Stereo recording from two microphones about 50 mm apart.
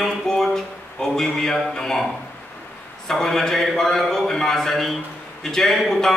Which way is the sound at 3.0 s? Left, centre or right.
Centre.